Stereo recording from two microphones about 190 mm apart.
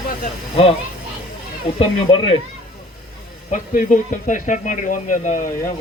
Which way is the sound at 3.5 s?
45° left (ahead or behind).